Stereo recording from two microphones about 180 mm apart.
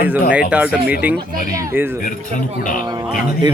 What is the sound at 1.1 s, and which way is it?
Speech, 55° right (ahead or behind).